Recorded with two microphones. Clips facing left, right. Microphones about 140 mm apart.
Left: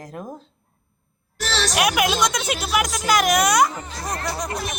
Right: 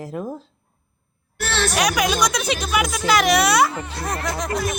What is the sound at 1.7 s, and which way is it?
A woman's voice, 5° left (ahead or behind).